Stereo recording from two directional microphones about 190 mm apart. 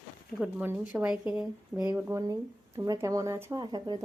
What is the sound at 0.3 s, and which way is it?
Speech, 10° right (ahead or behind).